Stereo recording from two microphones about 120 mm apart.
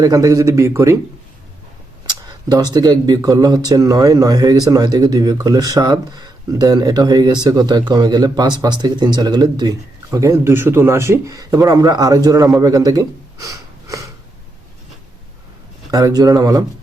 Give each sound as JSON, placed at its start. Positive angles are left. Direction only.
{"t": 0.0, "sound": "speech", "side_deg": -30}
{"t": 2.0, "sound": "speech", "side_deg": -35}
{"t": 15.9, "sound": "speech", "side_deg": -30}